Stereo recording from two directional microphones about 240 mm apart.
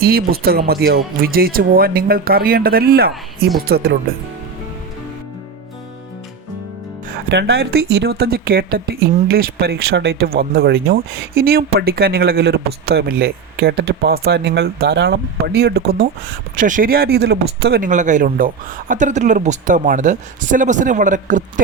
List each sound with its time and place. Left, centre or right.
0.0 s speech: right
7.3 s speech: right